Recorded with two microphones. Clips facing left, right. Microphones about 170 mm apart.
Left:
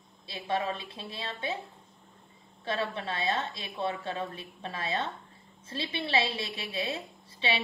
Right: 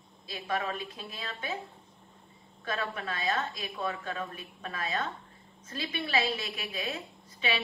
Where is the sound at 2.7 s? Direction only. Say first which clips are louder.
Left 2 dB; 25° left (ahead or behind).